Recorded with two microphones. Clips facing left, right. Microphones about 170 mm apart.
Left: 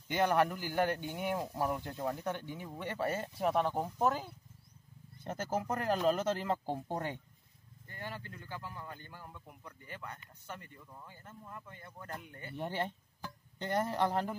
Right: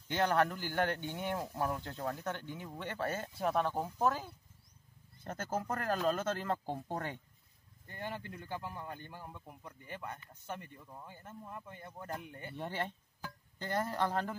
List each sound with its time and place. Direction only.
0.1 s speech: 10° left (ahead or behind)
7.9 s a man's voice: 15° right (ahead or behind)
12.5 s speech: 15° left (ahead or behind)